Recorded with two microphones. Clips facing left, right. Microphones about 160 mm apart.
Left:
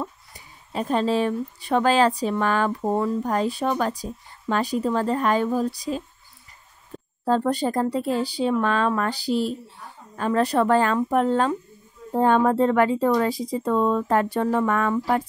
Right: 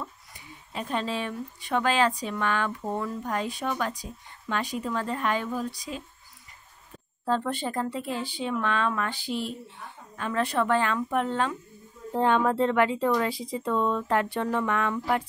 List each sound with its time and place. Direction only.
0.0 s speech: 35° left (ahead or behind)
7.2 s speech: 40° left (ahead or behind)